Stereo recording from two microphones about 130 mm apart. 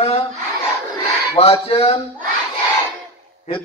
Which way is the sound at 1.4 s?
50° left (ahead or behind).